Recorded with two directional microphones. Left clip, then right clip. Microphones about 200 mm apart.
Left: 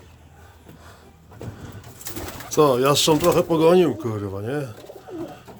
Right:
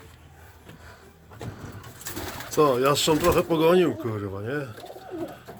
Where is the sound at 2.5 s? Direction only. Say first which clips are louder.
Left 3 dB; 25° left (ahead or behind).